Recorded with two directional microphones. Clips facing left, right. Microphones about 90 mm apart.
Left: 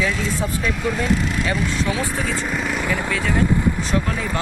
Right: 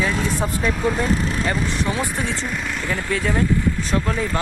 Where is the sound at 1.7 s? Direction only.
20° right (ahead or behind).